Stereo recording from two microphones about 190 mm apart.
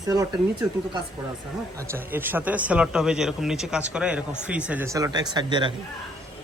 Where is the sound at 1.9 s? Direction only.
10° right (ahead or behind).